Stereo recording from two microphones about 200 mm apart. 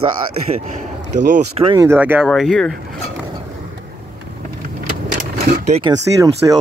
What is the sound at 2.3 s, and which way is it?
Speech, centre (ahead or behind).